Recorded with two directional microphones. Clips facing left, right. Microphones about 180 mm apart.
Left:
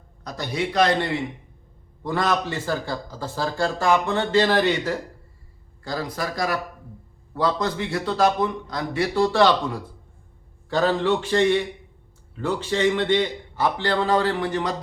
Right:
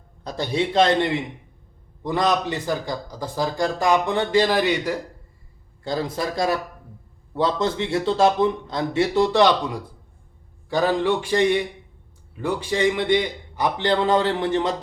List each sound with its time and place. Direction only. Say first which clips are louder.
0.3 s a man's voice: right 3 dB; 25° right (ahead or behind); by 4.9 s 10° right (ahead or behind)
5.8 s a man's voice: right 3 dB; 25° right (ahead or behind)